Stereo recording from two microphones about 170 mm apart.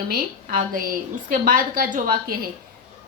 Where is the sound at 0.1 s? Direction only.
55° right (ahead or behind).